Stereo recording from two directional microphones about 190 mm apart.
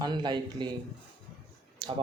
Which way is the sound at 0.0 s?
25° right (ahead or behind).